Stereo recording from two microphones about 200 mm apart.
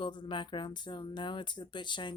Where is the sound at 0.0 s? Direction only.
25° left (ahead or behind).